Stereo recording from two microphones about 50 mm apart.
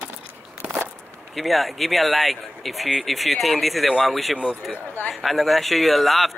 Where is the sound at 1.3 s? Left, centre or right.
Centre.